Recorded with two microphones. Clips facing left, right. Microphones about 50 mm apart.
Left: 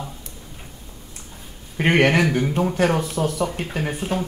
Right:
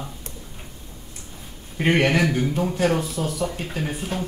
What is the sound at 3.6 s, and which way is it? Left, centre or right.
Speech, left.